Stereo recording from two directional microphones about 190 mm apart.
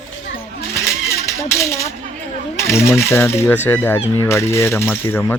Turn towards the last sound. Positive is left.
turn(degrees=10)  # may be behind; listen again after turning